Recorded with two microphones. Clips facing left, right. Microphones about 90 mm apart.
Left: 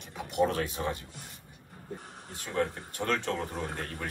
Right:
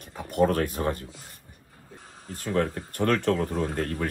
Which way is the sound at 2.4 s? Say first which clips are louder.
Right 5 dB; 60° right (ahead or behind).